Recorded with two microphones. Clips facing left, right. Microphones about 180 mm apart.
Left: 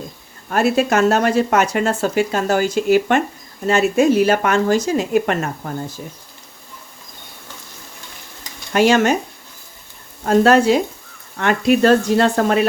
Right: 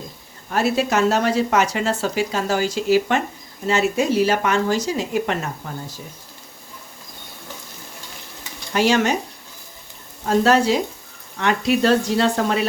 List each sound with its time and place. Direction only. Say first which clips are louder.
0.5 s speech: left 3 dB; 50° left (ahead or behind)
8.7 s speech: left 4 dB; 50° left (ahead or behind)
10.2 s speech: left 4 dB; 55° left (ahead or behind)